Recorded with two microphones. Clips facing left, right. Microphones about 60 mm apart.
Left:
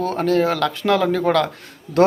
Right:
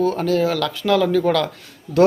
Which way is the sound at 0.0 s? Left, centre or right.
Left.